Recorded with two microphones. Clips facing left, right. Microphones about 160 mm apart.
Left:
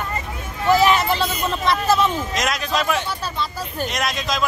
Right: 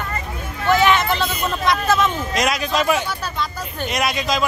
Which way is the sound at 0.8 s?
35° left (ahead or behind).